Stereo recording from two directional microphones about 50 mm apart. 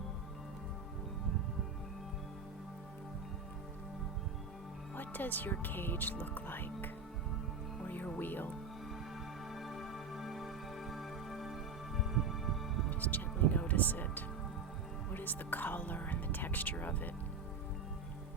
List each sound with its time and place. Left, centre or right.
4.9 s speech: left
7.9 s music: left
9.5 s music: centre
12.9 s music: left